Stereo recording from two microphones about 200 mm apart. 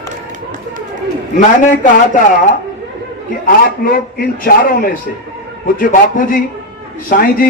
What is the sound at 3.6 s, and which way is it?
A man's voice, 45° left (ahead or behind).